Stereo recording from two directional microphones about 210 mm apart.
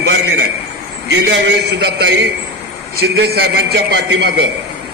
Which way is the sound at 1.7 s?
55° right (ahead or behind).